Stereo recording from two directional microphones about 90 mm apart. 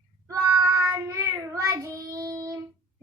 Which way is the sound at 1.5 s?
40° right (ahead or behind).